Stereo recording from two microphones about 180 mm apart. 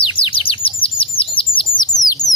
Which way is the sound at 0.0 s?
30° left (ahead or behind).